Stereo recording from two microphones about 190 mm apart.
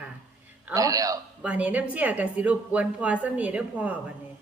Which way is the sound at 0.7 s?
20° right (ahead or behind).